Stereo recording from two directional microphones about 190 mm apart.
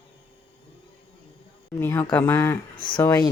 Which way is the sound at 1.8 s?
10° left (ahead or behind).